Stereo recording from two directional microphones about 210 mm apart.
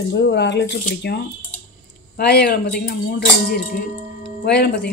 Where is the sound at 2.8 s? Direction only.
45° left (ahead or behind).